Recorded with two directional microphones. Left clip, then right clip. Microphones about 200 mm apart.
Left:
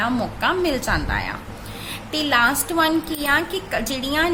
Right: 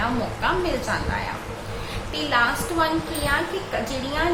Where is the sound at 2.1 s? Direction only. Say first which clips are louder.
Left 3 dB; 60° left (ahead or behind).